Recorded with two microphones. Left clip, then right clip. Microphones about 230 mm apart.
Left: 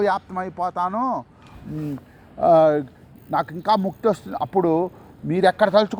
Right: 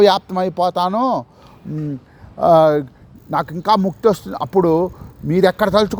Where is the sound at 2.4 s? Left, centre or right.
Right.